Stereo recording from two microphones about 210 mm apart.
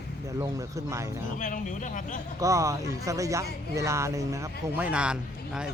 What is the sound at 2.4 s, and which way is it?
Speech, 15° right (ahead or behind).